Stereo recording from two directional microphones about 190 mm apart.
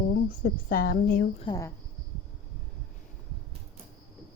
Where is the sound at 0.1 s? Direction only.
45° left (ahead or behind).